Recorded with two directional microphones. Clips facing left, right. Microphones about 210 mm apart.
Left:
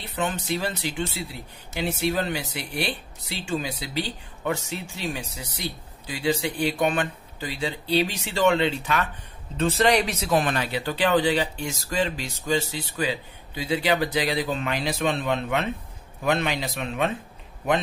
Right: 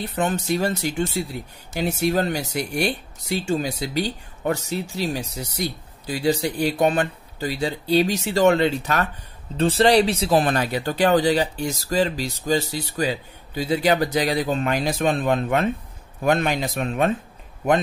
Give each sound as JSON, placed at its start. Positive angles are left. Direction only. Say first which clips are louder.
{"t": 0.0, "sound": "speech", "louder": "right 5 dB", "side_deg": -45}